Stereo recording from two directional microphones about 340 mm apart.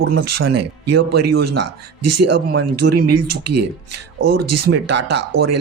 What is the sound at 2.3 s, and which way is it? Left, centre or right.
Speech, right.